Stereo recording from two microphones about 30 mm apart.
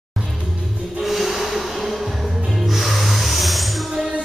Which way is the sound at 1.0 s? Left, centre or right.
Centre.